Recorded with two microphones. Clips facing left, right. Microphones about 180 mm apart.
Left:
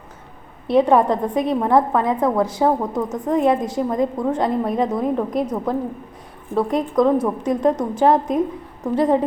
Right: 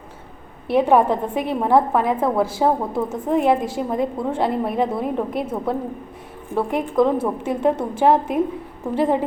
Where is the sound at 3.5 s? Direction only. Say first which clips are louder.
Even; 25° right (ahead or behind).